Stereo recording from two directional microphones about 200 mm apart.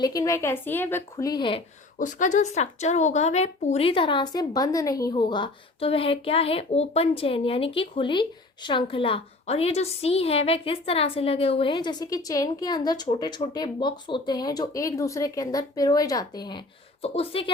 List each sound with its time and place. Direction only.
0.0 s a woman's voice: 15° left (ahead or behind)
2.0 s a woman's voice: 40° left (ahead or behind)